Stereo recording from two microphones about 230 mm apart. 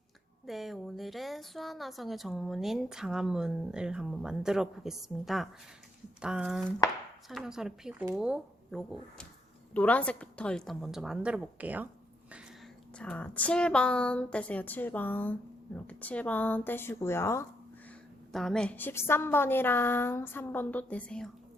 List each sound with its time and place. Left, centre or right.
0.4 s speech: centre
13.0 s a woman's voice: centre